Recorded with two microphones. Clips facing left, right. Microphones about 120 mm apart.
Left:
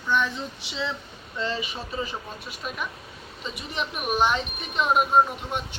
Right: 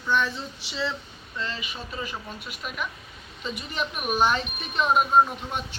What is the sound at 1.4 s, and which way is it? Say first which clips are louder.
Speech: left 4 dB; 25° left (ahead or behind).